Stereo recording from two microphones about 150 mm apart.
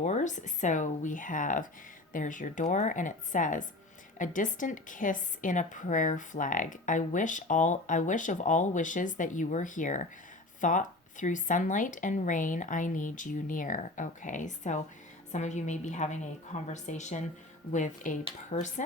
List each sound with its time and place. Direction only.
0.0 s a woman's voice: 50° left (ahead or behind)